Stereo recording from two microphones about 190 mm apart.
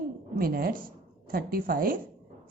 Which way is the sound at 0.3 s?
50° right (ahead or behind).